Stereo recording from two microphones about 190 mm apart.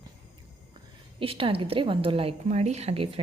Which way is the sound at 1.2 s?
30° right (ahead or behind).